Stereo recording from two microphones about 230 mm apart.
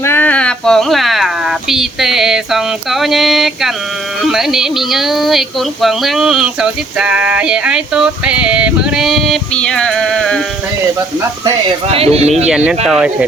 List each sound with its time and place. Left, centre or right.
0.0 s a sound: centre
4.2 s speech: centre
11.4 s speech: right
12.5 s speech: centre